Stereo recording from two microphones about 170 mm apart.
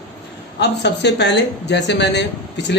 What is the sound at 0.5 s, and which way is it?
Speech, 85° left.